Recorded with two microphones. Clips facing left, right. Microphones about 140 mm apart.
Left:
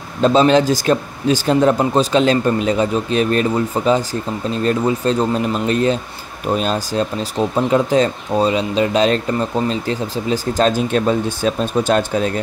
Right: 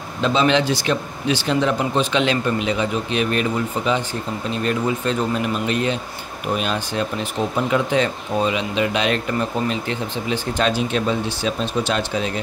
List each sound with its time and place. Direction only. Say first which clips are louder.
0.2 s speech: left 6 dB; 40° left (ahead or behind)